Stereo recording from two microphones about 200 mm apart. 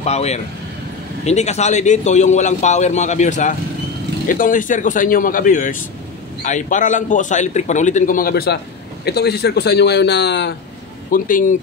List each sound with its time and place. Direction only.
0.0 s a man's voice: 35° left (ahead or behind); by 10.5 s 60° left (ahead or behind)
11.1 s speech: 45° left (ahead or behind)